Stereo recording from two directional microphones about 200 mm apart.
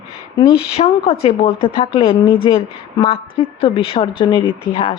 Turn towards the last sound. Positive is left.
turn(degrees=25)  # may be behind; listen again after turning